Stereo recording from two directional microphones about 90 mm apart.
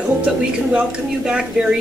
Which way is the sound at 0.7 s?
10° right (ahead or behind).